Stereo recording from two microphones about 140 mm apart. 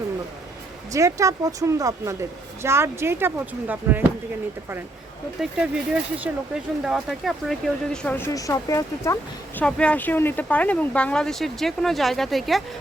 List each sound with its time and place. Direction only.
0.9 s speech: 20° right (ahead or behind)
5.4 s speech: 5° right (ahead or behind)
8.0 s speech: 15° left (ahead or behind)
9.6 s speech: 5° left (ahead or behind)